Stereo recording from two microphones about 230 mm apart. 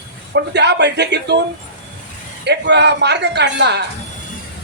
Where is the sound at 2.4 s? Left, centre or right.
Right.